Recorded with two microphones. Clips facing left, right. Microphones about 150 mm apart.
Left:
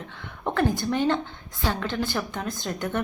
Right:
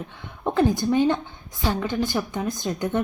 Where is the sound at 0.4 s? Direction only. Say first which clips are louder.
Right 4 dB; 15° right (ahead or behind).